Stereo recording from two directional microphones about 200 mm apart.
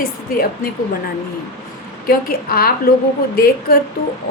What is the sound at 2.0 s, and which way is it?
A woman's voice, 50° left (ahead or behind).